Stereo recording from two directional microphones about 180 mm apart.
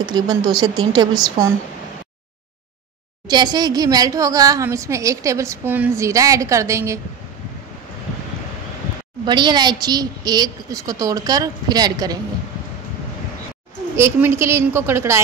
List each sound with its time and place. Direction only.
0.0 s a woman's voice: 20° right (ahead or behind)
3.3 s a woman's voice: 25° right (ahead or behind)
9.2 s a woman's voice: 25° right (ahead or behind)
13.9 s a woman's voice: 15° right (ahead or behind)